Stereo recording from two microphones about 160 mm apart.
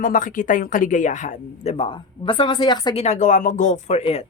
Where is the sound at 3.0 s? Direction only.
50° left (ahead or behind).